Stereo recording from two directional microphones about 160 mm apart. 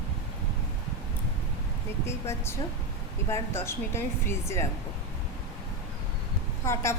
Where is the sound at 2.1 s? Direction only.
15° left (ahead or behind).